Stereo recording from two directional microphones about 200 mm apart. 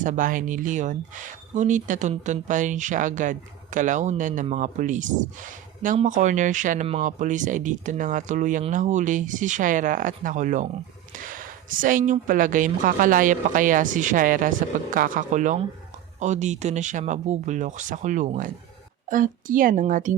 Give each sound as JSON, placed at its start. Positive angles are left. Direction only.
{"t": 0.0, "sound": "speech", "side_deg": -40}